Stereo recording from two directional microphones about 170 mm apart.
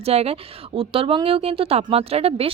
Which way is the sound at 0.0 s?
35° right (ahead or behind).